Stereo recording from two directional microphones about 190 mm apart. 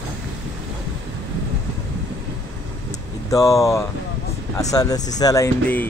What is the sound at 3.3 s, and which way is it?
Speech, 15° left (ahead or behind).